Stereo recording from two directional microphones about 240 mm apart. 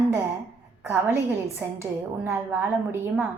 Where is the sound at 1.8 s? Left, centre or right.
Centre.